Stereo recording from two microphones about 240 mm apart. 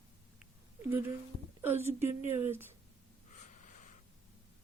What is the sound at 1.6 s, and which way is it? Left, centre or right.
Speech, centre.